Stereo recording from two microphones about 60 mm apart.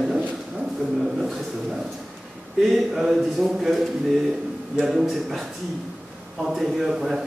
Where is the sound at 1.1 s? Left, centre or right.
Centre.